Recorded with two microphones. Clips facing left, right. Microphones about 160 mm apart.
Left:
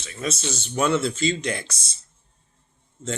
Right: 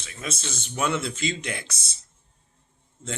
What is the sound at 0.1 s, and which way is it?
A man's voice, 35° left (ahead or behind).